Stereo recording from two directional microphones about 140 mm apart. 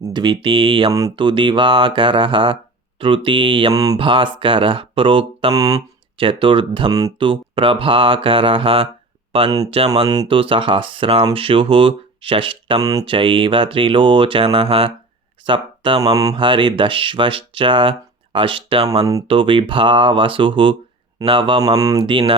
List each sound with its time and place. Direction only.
0.0 s speech: 35° right (ahead or behind)
3.7 s speech: 25° right (ahead or behind)
3.9 s speech: 40° right (ahead or behind)
5.5 s speech: 25° right (ahead or behind)
6.1 s speech: 40° right (ahead or behind)
12.8 s speech: 25° right (ahead or behind)
13.1 s speech: 40° right (ahead or behind)